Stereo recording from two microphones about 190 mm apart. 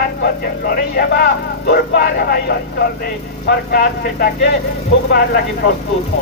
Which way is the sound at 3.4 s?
50° left (ahead or behind).